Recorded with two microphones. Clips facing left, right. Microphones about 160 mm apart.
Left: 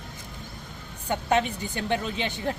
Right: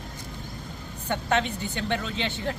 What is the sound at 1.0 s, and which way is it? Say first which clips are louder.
A woman's voice: left 1 dB; 10° left (ahead or behind).